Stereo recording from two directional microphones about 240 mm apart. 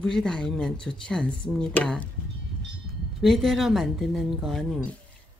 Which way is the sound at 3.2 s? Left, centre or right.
Centre.